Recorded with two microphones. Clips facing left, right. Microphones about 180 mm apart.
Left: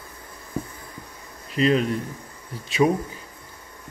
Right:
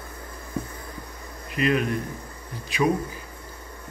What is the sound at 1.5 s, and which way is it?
Speech, 25° left (ahead or behind).